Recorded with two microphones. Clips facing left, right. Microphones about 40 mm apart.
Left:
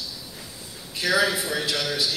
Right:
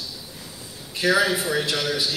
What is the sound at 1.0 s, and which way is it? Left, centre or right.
A man's voice, centre.